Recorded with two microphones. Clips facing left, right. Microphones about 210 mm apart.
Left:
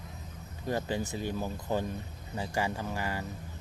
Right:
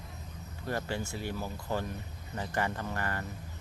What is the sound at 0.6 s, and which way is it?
Speech, 15° left (ahead or behind).